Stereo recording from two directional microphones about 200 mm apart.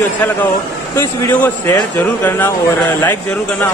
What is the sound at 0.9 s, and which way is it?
A man's voice, 10° left (ahead or behind).